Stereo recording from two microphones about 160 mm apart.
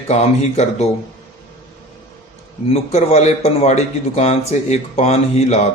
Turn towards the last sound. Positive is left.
turn(degrees=45)  # may be behind; listen again after turning